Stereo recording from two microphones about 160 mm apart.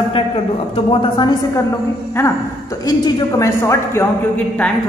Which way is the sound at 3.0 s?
20° left (ahead or behind).